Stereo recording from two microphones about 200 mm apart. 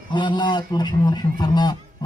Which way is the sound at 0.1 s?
20° left (ahead or behind).